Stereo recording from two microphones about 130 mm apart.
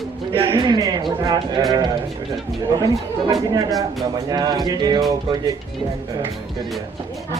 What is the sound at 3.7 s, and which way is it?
Music, centre (ahead or behind).